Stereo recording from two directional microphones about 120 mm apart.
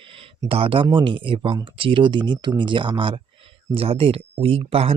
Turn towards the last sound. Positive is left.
turn(degrees=-55)  # may be behind; listen again after turning